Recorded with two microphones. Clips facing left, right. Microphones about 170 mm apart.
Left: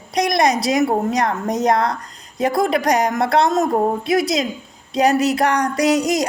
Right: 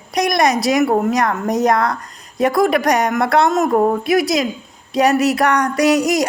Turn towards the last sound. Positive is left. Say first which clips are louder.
# right 2 dB
turn(degrees=30)  # may be behind; listen again after turning